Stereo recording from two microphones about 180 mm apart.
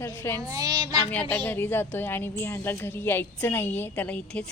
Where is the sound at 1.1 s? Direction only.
10° left (ahead or behind).